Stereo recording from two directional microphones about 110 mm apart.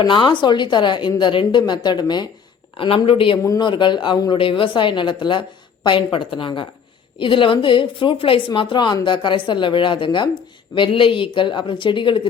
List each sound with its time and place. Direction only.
0.0 s speech: 45° left (ahead or behind)
2.7 s speech: 55° left (ahead or behind)
3.6 s speech: 45° left (ahead or behind)